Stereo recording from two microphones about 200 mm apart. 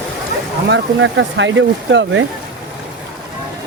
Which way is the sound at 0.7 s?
70° right (ahead or behind).